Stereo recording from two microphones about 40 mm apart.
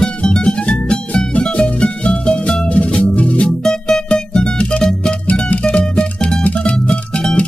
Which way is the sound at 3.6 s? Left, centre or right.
Centre.